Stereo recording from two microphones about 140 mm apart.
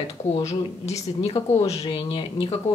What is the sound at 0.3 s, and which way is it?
A woman's voice, 50° left (ahead or behind).